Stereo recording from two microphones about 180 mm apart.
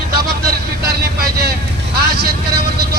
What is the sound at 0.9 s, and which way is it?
Speech, 60° right (ahead or behind).